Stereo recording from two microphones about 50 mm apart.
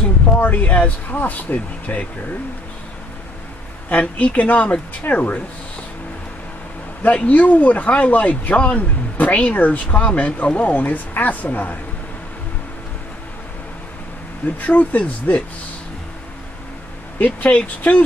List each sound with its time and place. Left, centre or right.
0.4 s speech: left
3.9 s speech: left
7.0 s speech: left
14.6 s speech: left
17.2 s speech: left